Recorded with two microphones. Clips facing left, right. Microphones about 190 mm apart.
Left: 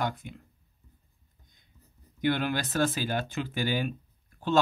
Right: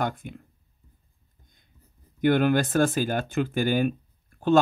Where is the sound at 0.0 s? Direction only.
50° right (ahead or behind).